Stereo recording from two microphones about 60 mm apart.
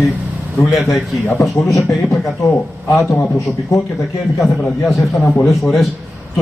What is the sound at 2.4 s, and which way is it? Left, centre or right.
Speech, left.